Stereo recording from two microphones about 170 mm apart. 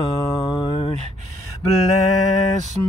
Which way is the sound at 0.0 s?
25° left (ahead or behind).